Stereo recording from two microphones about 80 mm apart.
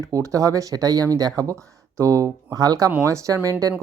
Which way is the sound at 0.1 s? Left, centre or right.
Right.